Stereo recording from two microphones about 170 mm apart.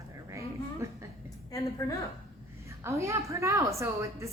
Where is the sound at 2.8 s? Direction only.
15° right (ahead or behind).